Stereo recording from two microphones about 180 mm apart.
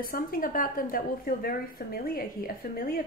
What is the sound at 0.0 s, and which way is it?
A woman's voice, 50° left (ahead or behind).